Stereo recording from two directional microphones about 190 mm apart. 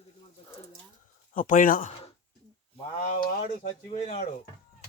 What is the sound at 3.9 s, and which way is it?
Speech, 35° left (ahead or behind).